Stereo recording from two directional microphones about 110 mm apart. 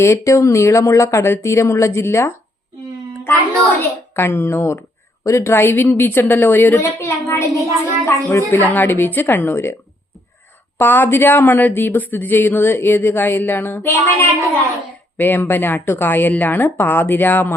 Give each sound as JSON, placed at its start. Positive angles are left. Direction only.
{"t": 0.0, "sound": "speech", "side_deg": 25}
{"t": 4.1, "sound": "a woman's voice", "side_deg": 20}
{"t": 10.8, "sound": "speech", "side_deg": 20}